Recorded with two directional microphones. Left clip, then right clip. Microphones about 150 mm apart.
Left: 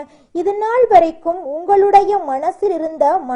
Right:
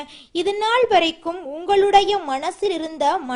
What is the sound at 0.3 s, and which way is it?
A woman's voice, 30° right (ahead or behind).